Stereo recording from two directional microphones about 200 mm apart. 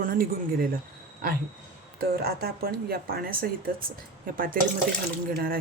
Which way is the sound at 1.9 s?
50° right (ahead or behind).